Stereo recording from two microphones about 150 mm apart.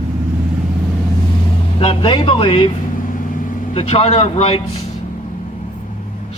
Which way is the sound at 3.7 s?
40° left (ahead or behind).